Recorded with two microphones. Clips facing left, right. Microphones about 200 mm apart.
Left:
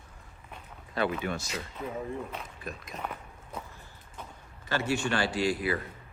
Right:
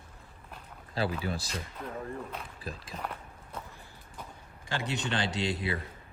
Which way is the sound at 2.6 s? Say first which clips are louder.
Left 1 dB; 30° right (ahead or behind).